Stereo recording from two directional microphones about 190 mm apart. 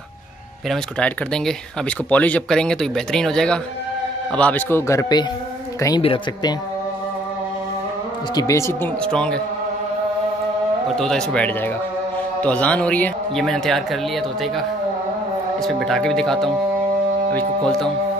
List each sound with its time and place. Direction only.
0.7 s speech: 5° left (ahead or behind)
8.4 s speech: 15° left (ahead or behind)
11.0 s speech: 5° left (ahead or behind)
15.6 s speech: centre (ahead or behind)